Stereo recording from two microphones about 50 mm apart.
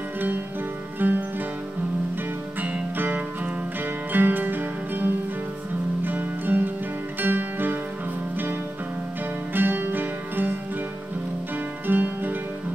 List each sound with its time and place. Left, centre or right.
0.9 s music: right
2.6 s music: right
9.5 s music: right
11.8 s music: right